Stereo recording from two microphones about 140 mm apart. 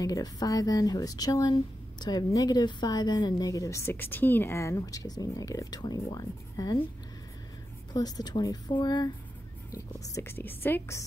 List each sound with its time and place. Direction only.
0.0 s speech: 25° left (ahead or behind)
7.9 s speech: 30° left (ahead or behind)